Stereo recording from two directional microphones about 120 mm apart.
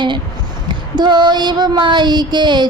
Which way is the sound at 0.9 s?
35° right (ahead or behind).